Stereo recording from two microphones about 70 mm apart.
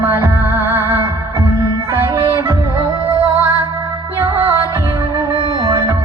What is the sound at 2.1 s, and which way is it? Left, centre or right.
Music, right.